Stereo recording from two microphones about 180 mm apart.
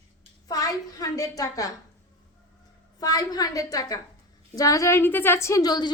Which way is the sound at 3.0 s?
20° left (ahead or behind).